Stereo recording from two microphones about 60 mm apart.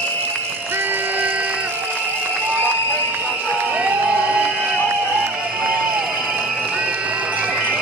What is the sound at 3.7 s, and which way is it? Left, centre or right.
Crowd, right.